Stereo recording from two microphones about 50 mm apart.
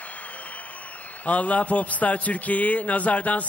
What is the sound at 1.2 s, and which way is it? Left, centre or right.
A man's voice, left.